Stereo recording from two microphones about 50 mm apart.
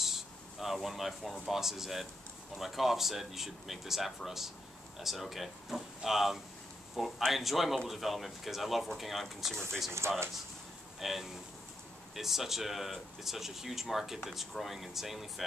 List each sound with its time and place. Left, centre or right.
0.0 s a sound: centre
1.5 s speech: centre
10.0 s speech: right
11.0 s speech: centre